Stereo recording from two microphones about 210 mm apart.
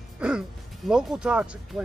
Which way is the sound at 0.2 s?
5° right (ahead or behind).